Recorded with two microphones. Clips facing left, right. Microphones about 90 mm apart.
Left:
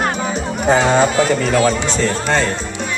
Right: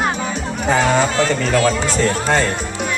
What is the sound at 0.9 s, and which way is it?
Speech, 20° left (ahead or behind).